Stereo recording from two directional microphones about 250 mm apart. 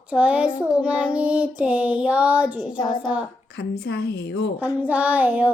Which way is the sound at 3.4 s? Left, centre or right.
Left.